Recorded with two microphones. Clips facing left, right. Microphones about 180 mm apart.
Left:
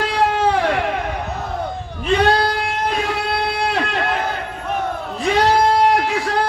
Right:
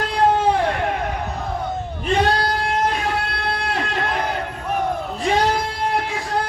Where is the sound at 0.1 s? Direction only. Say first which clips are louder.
Right 3 dB; 90° left.